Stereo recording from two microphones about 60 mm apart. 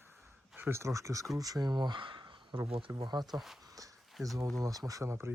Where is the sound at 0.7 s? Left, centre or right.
Right.